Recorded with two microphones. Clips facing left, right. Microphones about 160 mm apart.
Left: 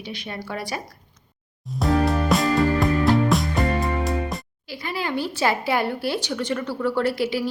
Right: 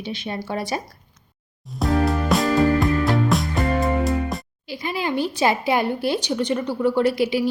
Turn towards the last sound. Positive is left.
turn(degrees=-15)  # may be behind; listen again after turning